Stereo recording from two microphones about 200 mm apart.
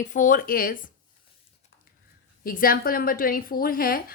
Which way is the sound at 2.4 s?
45° left (ahead or behind).